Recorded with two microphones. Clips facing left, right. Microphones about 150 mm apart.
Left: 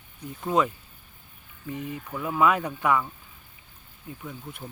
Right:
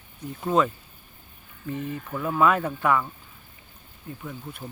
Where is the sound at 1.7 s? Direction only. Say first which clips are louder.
Right 3 dB; 15° left (ahead or behind).